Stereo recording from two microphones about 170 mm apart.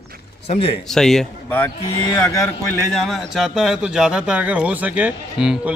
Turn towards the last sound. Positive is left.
turn(degrees=-5)  # may be behind; listen again after turning